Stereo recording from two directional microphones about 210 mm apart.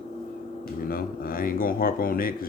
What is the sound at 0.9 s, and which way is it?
Mantra, 45° left (ahead or behind).